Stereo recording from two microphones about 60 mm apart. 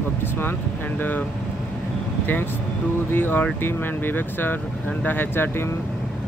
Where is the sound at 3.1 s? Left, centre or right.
Left.